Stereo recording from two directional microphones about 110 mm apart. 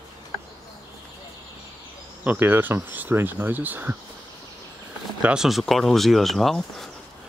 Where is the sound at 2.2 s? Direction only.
20° right (ahead or behind).